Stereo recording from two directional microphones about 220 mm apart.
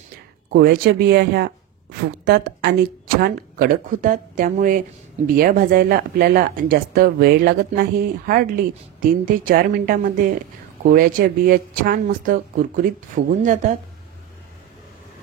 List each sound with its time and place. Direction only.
0.5 s a woman's voice: 45° right (ahead or behind)